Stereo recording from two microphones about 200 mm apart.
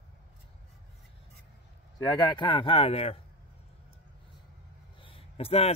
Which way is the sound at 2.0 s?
20° left (ahead or behind).